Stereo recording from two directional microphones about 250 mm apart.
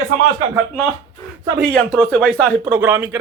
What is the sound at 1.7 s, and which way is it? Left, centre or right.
Speech, centre.